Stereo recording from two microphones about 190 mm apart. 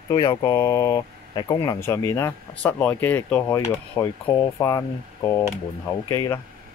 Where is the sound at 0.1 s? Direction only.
25° left (ahead or behind).